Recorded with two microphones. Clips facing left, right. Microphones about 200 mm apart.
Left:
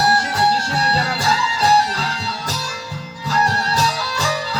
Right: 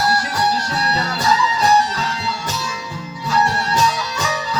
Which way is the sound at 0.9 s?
30° left (ahead or behind).